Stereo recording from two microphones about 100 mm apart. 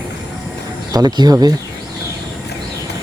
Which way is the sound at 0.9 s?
40° right (ahead or behind).